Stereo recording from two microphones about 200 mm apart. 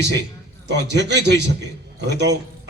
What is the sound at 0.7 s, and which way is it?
A man's voice, 60° right (ahead or behind).